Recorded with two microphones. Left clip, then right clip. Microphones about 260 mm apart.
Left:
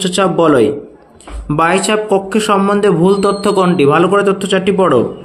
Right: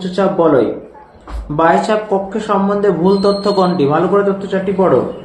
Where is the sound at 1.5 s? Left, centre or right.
Left.